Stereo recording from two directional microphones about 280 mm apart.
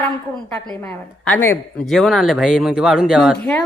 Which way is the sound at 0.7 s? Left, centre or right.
Centre.